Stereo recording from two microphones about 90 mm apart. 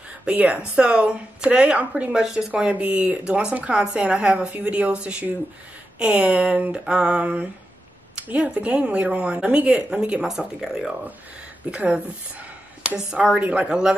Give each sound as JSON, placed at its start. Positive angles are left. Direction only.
{"t": 0.2, "sound": "speech", "side_deg": -15}
{"t": 11.7, "sound": "speech", "side_deg": -15}